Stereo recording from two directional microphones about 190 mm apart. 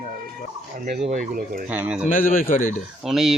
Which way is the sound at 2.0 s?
45° left (ahead or behind).